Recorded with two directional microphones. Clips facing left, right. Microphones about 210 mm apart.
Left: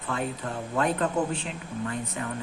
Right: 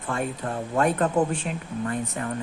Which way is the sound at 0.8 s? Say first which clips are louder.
Right 4 dB; 50° right (ahead or behind).